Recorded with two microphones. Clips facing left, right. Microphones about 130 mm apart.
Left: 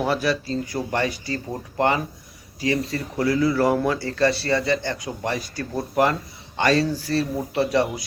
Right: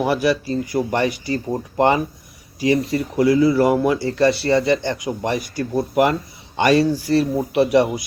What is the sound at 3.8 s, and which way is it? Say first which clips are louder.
Speech: right 4 dB; 15° right (ahead or behind).